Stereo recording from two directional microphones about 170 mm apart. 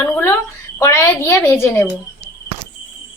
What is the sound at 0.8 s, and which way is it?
A child's voice, 15° left (ahead or behind).